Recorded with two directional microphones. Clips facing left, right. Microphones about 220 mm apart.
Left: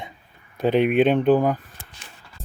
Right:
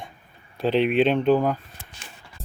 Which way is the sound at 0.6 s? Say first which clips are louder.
Left 2 dB; 55° left (ahead or behind).